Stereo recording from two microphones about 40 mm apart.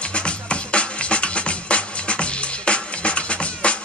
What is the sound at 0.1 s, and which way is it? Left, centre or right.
Music, left.